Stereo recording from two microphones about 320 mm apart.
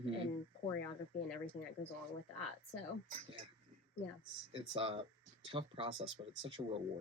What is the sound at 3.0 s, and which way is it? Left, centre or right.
Speech, right.